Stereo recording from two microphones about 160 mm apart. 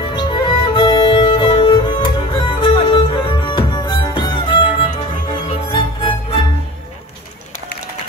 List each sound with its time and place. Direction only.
0.0 s music: 30° left (ahead or behind)